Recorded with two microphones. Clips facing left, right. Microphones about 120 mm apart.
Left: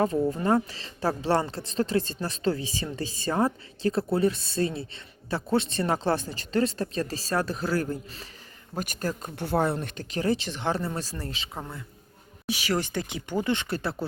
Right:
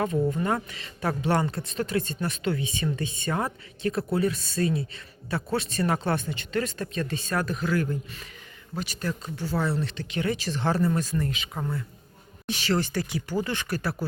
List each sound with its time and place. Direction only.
0.3 s speech: 30° left (ahead or behind)
8.7 s speech: 45° left (ahead or behind)
9.3 s speech: 60° left (ahead or behind); by 10.5 s 30° left (ahead or behind)
10.5 s speech: 20° left (ahead or behind)
12.5 s speech: 10° left (ahead or behind)